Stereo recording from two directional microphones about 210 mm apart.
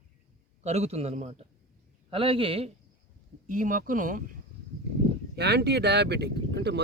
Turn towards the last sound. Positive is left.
turn(degrees=-55)  # may be behind; listen again after turning